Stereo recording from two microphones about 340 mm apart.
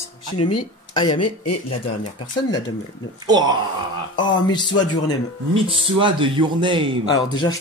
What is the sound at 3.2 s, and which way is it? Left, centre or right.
Speech, centre.